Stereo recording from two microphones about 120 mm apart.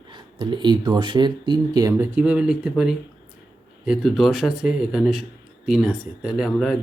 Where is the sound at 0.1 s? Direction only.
40° right (ahead or behind).